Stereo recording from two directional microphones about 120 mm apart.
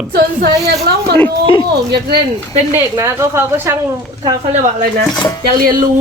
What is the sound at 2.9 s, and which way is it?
Speech, 25° right (ahead or behind).